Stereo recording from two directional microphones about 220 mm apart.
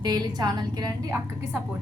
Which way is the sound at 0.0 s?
15° right (ahead or behind).